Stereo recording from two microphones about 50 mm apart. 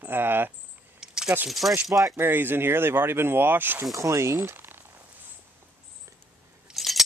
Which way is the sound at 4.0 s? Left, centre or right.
Right.